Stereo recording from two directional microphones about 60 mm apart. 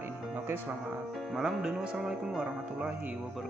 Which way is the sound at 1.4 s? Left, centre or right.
Centre.